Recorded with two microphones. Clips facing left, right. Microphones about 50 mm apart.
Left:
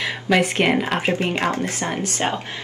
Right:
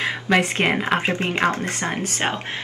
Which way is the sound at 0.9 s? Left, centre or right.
Right.